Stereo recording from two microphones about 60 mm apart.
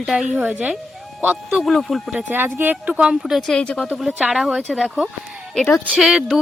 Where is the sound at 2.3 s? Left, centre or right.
Right.